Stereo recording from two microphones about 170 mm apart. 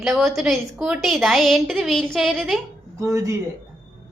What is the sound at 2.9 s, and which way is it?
Speech, 20° right (ahead or behind).